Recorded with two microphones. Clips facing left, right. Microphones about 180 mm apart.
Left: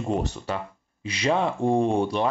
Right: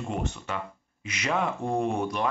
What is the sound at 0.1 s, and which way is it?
Speech, 35° left (ahead or behind).